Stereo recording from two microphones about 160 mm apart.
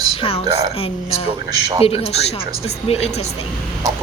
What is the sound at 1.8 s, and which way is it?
A woman's voice, 40° left (ahead or behind).